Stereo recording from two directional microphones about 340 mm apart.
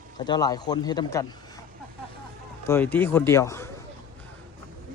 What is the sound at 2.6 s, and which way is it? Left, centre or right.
A man's voice, centre.